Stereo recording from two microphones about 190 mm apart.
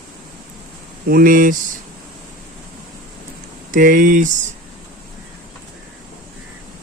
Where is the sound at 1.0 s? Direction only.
50° right (ahead or behind).